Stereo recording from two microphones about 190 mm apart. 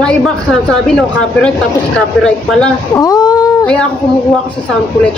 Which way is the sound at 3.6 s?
5° left (ahead or behind).